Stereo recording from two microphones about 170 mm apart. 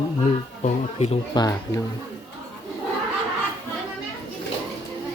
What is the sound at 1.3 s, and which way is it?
Speech, 20° left (ahead or behind).